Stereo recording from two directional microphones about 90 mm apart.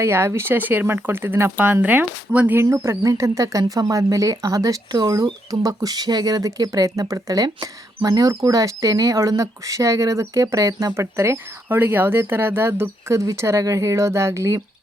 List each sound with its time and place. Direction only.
0.0 s speech: 30° right (ahead or behind)
2.6 s speech: 30° right (ahead or behind)